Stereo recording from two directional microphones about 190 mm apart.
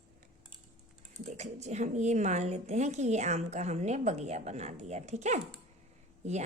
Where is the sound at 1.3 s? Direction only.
35° right (ahead or behind).